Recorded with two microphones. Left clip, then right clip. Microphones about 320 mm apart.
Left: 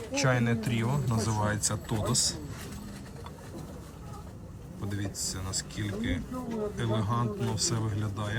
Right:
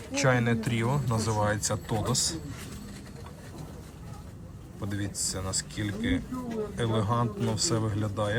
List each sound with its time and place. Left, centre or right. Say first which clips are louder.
0.1 s speech: right 3 dB; centre
4.8 s speech: right 2 dB; centre